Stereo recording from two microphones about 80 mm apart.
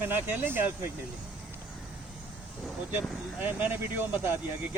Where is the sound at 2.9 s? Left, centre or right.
Right.